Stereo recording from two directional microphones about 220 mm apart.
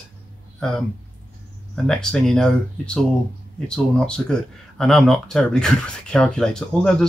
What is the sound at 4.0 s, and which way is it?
Speech, 5° left (ahead or behind).